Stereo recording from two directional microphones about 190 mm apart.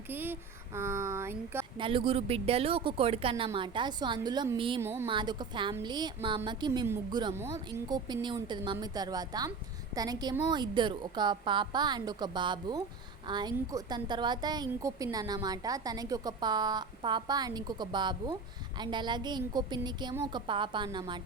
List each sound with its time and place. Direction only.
0.1 s speech: 10° right (ahead or behind)
1.8 s a woman's voice: 25° right (ahead or behind)
4.8 s speech: 10° right (ahead or behind)
5.0 s a woman's voice: 25° right (ahead or behind)